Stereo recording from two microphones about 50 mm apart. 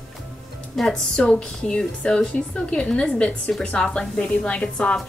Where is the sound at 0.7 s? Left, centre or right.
Centre.